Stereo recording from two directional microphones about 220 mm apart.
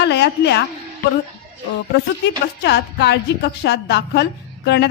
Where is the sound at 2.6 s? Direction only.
50° left (ahead or behind).